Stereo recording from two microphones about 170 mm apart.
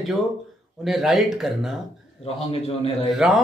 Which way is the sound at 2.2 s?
35° left (ahead or behind).